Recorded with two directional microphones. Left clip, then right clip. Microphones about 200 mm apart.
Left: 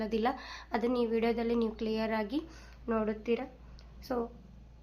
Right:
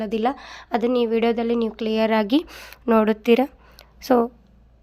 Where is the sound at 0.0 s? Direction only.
35° right (ahead or behind).